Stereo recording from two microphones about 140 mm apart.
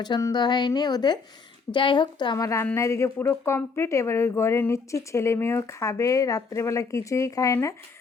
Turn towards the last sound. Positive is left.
turn(degrees=20)  # may be behind; listen again after turning